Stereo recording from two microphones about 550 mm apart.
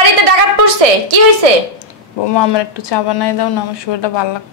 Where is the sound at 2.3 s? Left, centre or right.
Left.